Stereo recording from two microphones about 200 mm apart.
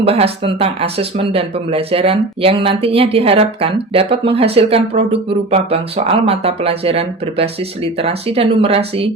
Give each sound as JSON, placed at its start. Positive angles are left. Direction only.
{"t": 0.0, "sound": "speech", "side_deg": -30}